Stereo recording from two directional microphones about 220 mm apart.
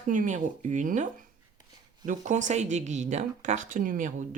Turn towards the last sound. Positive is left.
turn(degrees=-35)  # may be behind; listen again after turning